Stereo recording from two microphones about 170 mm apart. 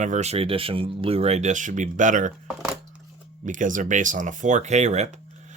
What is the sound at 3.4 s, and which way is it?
Speech, 50° right (ahead or behind).